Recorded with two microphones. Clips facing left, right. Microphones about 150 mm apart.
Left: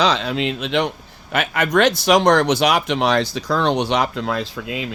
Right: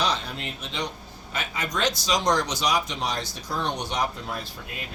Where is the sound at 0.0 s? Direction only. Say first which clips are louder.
Left 9 dB; 90° left.